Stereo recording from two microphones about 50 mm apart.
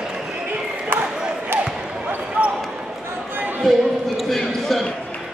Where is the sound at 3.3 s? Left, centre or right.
Right.